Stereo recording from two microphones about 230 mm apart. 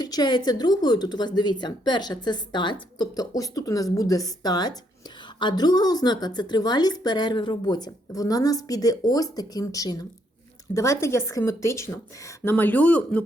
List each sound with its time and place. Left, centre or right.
0.0 s a woman's voice: centre